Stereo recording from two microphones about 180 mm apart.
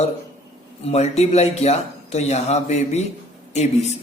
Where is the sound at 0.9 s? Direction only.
35° left (ahead or behind).